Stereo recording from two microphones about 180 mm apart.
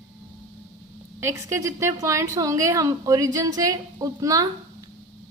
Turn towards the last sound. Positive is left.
turn(degrees=-20)  # may be behind; listen again after turning